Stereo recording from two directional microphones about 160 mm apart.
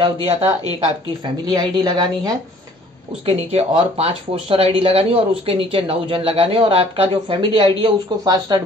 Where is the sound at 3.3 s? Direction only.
40° right (ahead or behind).